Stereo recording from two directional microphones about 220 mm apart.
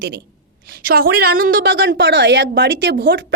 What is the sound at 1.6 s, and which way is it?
A woman's voice, 60° right (ahead or behind).